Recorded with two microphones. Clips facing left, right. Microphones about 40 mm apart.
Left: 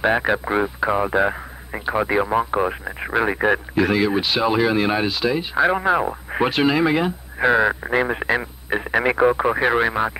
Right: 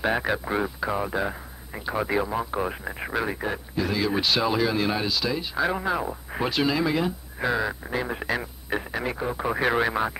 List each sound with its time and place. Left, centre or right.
0.0 s speech: left
2.8 s speech: centre
3.2 s speech: left
3.4 s speech: left
4.1 s speech: centre
8.9 s speech: left
9.7 s speech: centre